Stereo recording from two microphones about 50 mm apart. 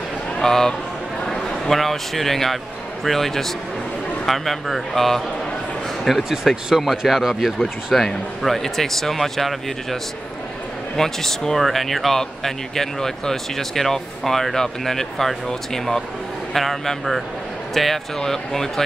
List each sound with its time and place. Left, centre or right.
0.4 s a man's voice: centre
11.0 s speech: centre